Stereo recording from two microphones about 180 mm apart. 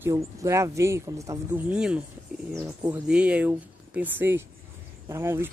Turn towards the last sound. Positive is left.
turn(degrees=-15)  # may be behind; listen again after turning